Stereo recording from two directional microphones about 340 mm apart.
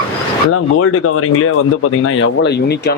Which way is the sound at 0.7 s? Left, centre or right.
Left.